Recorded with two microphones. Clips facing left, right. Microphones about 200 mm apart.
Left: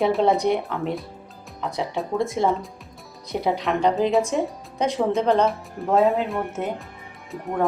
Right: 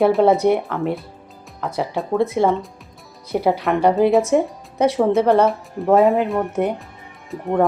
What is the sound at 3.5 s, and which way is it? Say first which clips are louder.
Speech: right 4 dB; 5° right (ahead or behind).